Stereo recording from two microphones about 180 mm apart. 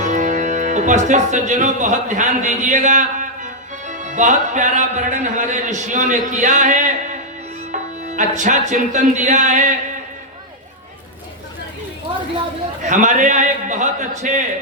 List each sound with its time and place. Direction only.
0.0 s speech: 45° right (ahead or behind)
7.7 s music: 45° right (ahead or behind)
12.8 s a man's voice: 45° right (ahead or behind)